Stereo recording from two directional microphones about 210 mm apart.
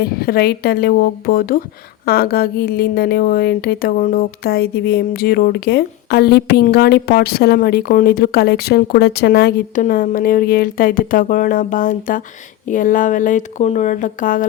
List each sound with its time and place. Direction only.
0.0 s speech: 45° left (ahead or behind)